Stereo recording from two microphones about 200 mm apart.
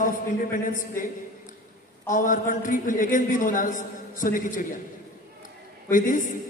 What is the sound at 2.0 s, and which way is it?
A man's voice, 40° left (ahead or behind).